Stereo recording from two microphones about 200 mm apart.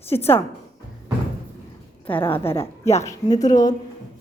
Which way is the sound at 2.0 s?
10° left (ahead or behind).